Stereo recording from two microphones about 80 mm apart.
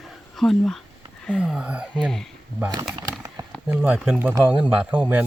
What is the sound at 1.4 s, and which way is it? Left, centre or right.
Speech, centre.